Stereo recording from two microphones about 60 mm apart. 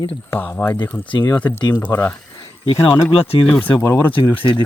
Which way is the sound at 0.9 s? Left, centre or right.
Left.